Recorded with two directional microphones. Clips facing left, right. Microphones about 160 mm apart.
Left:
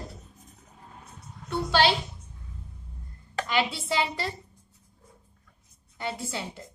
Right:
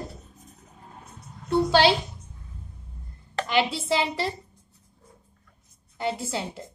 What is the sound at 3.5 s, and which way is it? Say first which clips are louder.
Speech: right 3 dB; 30° right (ahead or behind).